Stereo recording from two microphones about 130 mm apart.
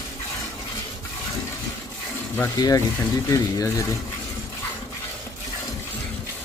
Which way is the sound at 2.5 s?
30° left (ahead or behind).